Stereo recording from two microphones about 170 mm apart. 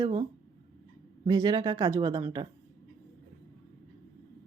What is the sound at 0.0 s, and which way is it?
Speech, 30° right (ahead or behind).